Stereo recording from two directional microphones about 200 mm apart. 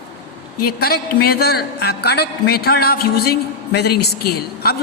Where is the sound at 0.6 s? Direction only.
50° left (ahead or behind).